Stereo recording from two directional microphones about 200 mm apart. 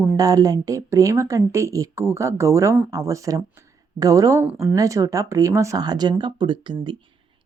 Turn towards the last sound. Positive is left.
turn(degrees=-25)  # may be behind; listen again after turning